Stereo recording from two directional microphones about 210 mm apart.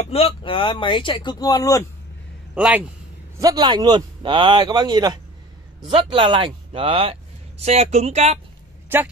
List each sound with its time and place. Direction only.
0.0 s speech: 30° left (ahead or behind)
2.5 s a man's voice: 5° right (ahead or behind)
3.3 s speech: 20° right (ahead or behind)